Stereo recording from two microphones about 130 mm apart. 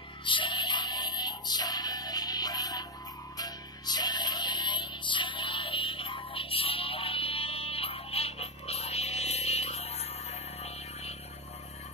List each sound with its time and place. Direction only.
0.2 s music: 40° left (ahead or behind)